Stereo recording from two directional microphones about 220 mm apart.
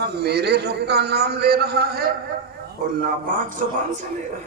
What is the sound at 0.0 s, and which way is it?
A man's voice, 50° right (ahead or behind).